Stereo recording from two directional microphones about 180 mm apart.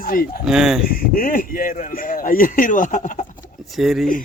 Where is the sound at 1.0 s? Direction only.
50° left (ahead or behind).